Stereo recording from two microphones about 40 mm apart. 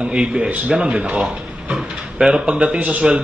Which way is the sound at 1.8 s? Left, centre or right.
Centre.